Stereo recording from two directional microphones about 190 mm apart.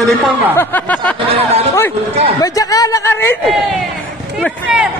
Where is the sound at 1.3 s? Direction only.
35° right (ahead or behind).